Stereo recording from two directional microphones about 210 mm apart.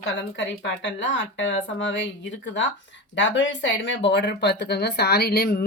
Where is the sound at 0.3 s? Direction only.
60° left (ahead or behind).